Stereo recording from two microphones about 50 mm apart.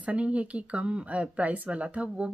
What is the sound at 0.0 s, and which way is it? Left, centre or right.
Speech, right.